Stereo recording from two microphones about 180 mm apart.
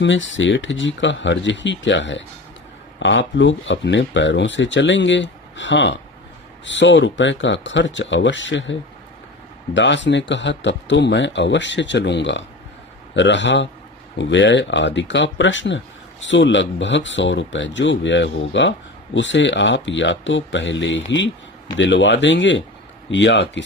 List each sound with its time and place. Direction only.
0.0 s speech: 90° left